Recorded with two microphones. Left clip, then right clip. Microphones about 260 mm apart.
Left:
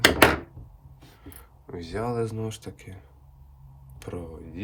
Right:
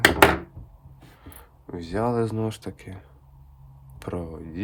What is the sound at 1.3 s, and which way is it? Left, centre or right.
Speech, centre.